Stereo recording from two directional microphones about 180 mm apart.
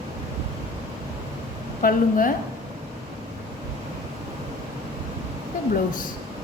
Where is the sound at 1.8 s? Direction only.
50° left (ahead or behind).